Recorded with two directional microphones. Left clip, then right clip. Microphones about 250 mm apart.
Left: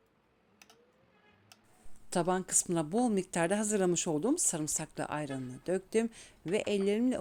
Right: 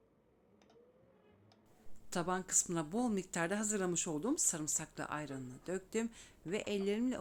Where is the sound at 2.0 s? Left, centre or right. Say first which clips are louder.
Left 6 dB; left.